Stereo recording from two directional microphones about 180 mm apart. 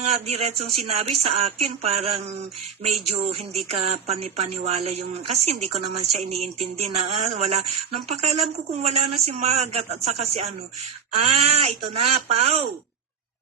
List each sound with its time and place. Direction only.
0.0 s speech: 35° right (ahead or behind)